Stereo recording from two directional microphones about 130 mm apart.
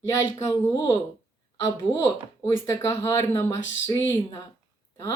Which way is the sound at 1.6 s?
25° left (ahead or behind).